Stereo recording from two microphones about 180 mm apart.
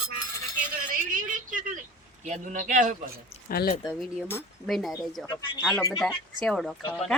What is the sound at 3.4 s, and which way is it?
Speech, 55° left (ahead or behind).